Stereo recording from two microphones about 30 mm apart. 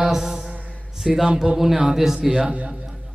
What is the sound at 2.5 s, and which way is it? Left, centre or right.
Speech, right.